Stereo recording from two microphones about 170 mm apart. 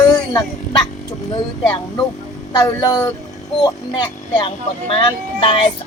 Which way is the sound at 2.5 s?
25° left (ahead or behind).